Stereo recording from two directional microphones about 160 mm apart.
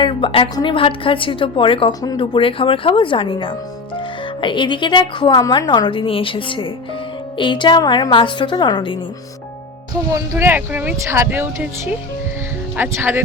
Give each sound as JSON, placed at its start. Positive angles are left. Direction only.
{"t": 0.0, "sound": "a woman's voice", "side_deg": 35}
{"t": 10.2, "sound": "speech", "side_deg": -15}